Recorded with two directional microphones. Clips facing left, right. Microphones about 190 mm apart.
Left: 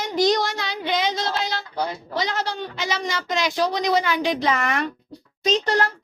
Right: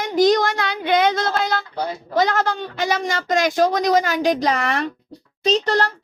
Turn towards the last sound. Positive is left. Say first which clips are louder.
# right 2 dB
turn(degrees=-40)  # may be behind; listen again after turning